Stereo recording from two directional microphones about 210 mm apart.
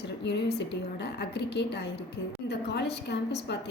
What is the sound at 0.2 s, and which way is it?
A woman's voice, 55° left (ahead or behind).